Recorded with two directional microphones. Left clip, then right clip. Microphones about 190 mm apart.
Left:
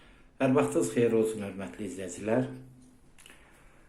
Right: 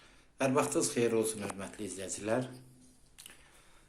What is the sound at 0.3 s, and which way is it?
Speech, 10° right (ahead or behind).